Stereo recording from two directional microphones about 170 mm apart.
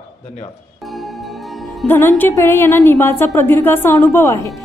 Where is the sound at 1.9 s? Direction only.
10° left (ahead or behind).